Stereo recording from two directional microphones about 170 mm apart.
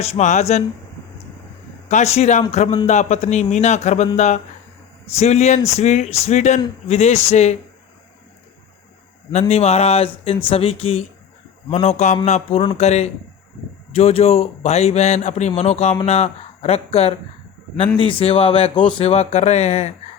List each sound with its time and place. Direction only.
0.0 s a man's voice: 40° left (ahead or behind)
1.9 s a man's voice: 40° left (ahead or behind)
9.3 s a man's voice: 40° left (ahead or behind)